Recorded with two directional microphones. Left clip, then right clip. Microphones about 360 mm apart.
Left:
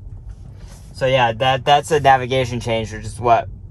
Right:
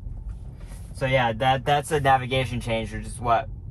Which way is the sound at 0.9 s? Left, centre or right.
Left.